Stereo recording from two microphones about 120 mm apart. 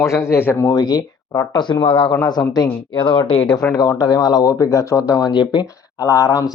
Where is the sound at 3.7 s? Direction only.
35° left (ahead or behind).